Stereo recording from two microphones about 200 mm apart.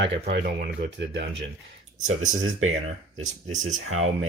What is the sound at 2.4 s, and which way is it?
Speech, 90° right.